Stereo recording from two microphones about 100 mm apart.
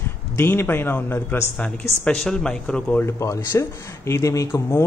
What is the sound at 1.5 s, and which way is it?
Speech, 10° left (ahead or behind).